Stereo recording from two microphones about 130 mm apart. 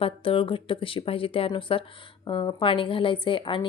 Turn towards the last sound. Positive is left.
turn(degrees=40)  # may be behind; listen again after turning